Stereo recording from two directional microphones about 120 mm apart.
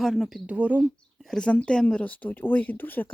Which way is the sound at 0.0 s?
Centre (ahead or behind).